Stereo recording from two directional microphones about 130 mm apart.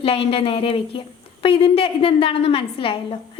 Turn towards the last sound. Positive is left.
turn(degrees=45)  # may be behind; listen again after turning